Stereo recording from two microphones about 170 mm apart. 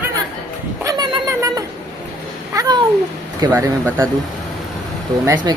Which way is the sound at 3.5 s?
10° right (ahead or behind).